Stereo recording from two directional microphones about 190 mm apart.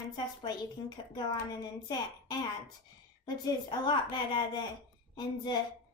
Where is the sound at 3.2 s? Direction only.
20° left (ahead or behind).